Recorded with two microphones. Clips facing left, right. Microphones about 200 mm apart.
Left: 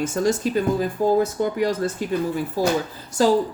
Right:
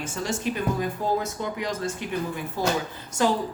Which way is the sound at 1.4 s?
40° left (ahead or behind).